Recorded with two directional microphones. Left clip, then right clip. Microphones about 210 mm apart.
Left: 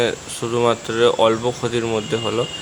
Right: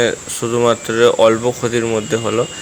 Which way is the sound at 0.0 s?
10° right (ahead or behind).